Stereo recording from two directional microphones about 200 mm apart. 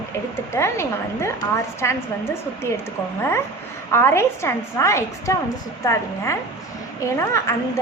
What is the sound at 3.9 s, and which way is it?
A woman's voice, 10° left (ahead or behind).